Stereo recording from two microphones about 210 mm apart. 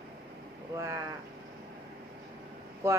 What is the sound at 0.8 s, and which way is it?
Speech, 15° right (ahead or behind).